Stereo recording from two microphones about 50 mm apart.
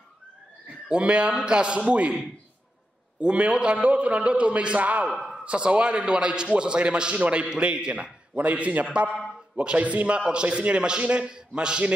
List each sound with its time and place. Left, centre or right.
0.8 s a man's voice: right
3.2 s a man's voice: right